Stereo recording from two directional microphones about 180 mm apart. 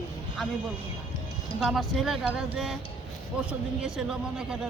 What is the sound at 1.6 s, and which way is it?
A man's voice, centre (ahead or behind).